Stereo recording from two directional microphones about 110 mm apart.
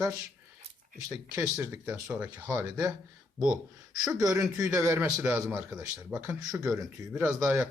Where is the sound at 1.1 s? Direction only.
30° right (ahead or behind).